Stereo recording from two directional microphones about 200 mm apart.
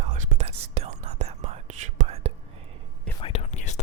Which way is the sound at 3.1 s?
30° left (ahead or behind).